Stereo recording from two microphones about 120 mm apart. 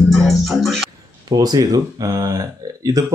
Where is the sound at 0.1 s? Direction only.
Centre (ahead or behind).